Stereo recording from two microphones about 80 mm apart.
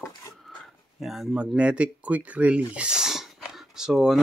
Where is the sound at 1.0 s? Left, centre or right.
Centre.